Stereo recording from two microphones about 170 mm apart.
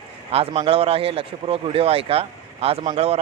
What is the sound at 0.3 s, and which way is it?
A man's voice, 35° right (ahead or behind).